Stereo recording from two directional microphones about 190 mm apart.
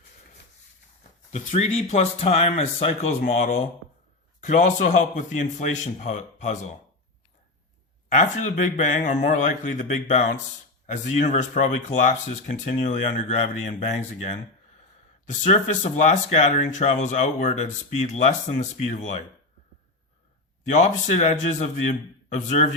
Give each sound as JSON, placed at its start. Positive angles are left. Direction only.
{"t": 1.3, "sound": "speech", "side_deg": 35}
{"t": 8.1, "sound": "speech", "side_deg": 40}
{"t": 15.4, "sound": "speech", "side_deg": 35}
{"t": 20.7, "sound": "speech", "side_deg": 40}